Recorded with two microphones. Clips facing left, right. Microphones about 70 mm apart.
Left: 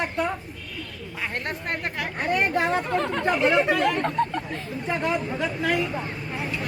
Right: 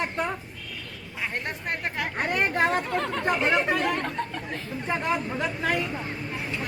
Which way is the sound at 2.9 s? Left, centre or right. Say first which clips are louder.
Left 3 dB; centre.